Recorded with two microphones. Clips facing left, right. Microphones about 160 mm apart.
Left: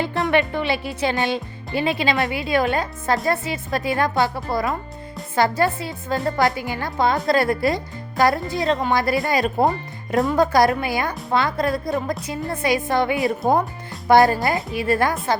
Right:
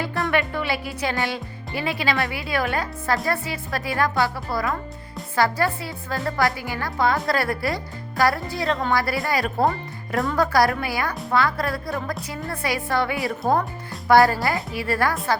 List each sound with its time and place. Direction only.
0.0 s speech: 20° left (ahead or behind)